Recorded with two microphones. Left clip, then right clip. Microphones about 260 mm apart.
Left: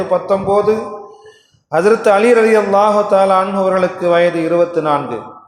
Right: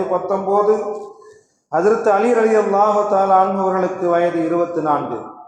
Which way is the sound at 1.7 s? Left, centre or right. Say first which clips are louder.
Left 4 dB; left.